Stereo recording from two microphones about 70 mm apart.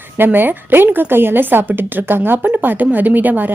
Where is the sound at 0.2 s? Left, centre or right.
Right.